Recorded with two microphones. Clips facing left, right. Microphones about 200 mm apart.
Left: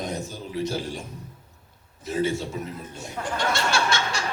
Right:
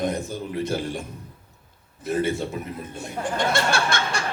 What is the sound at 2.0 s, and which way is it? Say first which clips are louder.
A man's voice: right 2 dB; 55° right (ahead or behind).